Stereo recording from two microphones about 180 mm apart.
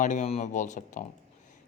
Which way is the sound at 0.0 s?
45° left (ahead or behind).